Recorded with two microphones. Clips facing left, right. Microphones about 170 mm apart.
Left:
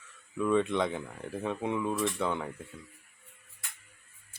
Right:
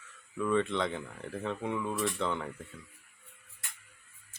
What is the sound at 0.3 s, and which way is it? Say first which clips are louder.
Speech: left 2 dB; 15° left (ahead or behind).